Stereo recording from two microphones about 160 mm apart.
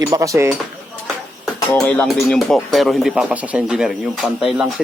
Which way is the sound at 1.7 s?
5° left (ahead or behind).